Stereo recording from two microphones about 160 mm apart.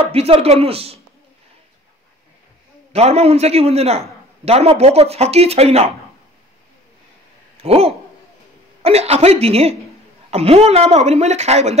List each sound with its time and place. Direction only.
0.0 s speech: 35° right (ahead or behind)
2.9 s speech: 40° right (ahead or behind)
7.6 s speech: 40° right (ahead or behind)